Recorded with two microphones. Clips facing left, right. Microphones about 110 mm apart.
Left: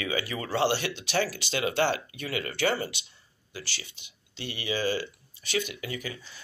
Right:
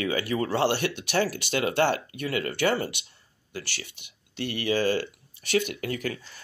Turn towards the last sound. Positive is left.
turn(degrees=-55)  # may be behind; listen again after turning